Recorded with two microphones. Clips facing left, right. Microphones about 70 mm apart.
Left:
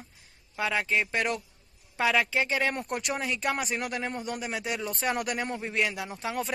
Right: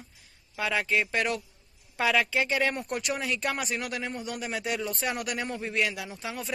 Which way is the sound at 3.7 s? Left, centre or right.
Left.